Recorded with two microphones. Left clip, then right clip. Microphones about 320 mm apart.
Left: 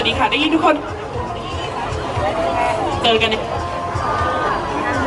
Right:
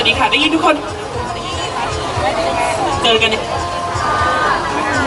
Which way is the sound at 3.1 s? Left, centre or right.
Centre.